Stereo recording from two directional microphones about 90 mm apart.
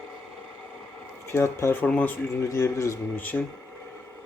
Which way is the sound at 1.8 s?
15° left (ahead or behind).